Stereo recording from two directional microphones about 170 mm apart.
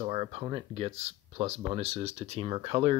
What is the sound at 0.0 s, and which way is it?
Speech, 35° right (ahead or behind).